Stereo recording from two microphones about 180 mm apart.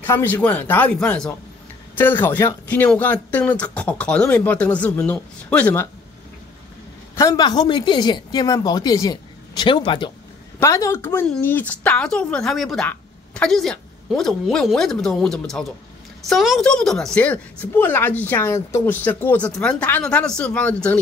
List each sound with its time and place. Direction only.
0.0 s a woman's voice: 10° left (ahead or behind)
7.2 s a woman's voice: 20° left (ahead or behind)